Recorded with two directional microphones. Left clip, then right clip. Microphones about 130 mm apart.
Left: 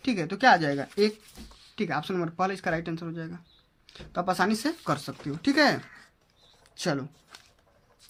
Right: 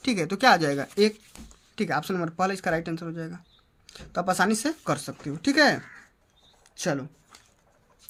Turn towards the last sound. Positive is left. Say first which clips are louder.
# right 1 dB
turn(degrees=-15)  # may be behind; listen again after turning